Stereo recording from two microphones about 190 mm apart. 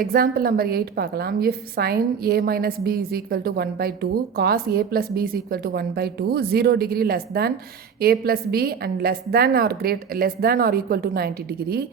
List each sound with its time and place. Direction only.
0.0 s a woman's voice: 50° right (ahead or behind)